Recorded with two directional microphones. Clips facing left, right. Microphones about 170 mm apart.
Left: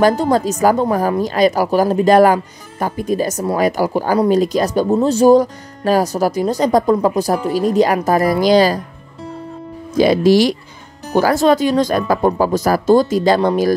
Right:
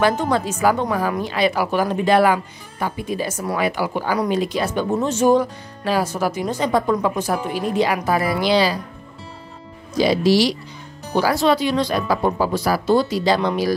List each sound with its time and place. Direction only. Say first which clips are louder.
0.0 s speech: left 5 dB; 35° left (ahead or behind)
9.9 s speech: left 5 dB; 50° left (ahead or behind)